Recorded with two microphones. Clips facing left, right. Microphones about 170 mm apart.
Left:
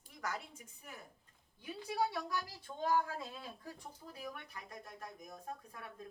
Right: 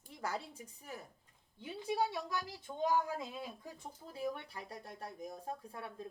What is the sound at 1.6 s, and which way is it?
Speech, 20° right (ahead or behind).